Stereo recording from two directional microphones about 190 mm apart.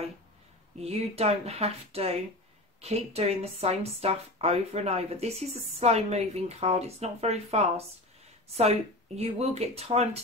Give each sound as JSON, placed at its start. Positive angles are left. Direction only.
{"t": 0.7, "sound": "speech", "side_deg": -35}